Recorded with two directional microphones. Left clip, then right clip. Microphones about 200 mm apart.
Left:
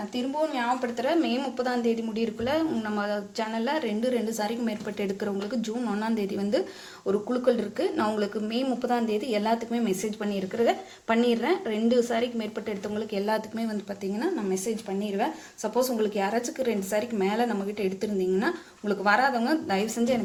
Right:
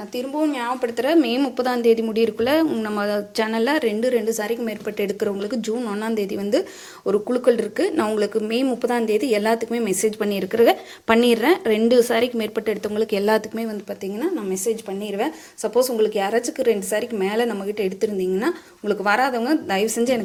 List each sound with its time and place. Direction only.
0.4 s a woman's voice: 40° right (ahead or behind)